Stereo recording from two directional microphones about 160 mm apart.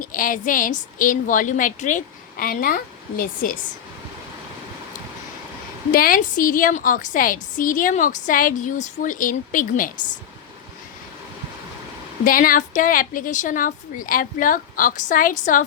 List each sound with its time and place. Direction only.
0.0 s a woman's voice: 60° left (ahead or behind)
5.9 s a woman's voice: 60° left (ahead or behind)
12.2 s a woman's voice: 60° left (ahead or behind)